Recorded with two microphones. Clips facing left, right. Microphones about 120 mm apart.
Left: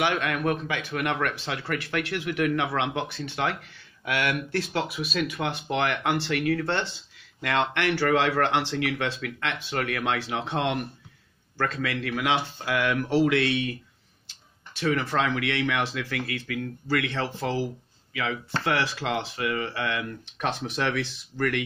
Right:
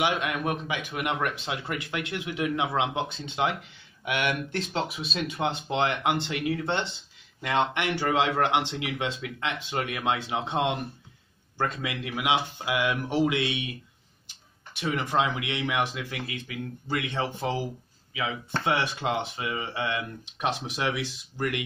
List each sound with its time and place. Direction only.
0.0 s speech: 20° right (ahead or behind)